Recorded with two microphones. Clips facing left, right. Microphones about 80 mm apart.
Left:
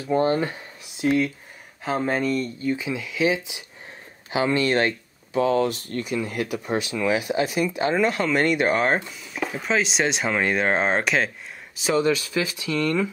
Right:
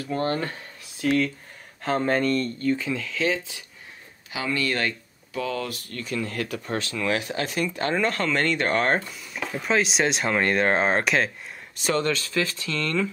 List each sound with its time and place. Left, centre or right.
0.0 s speech: centre
1.8 s speech: centre
4.3 s speech: left